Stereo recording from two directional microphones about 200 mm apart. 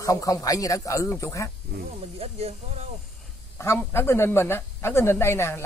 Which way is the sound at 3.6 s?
10° left (ahead or behind).